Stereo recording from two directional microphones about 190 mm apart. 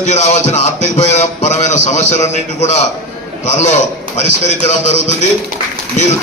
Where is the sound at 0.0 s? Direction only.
35° left (ahead or behind).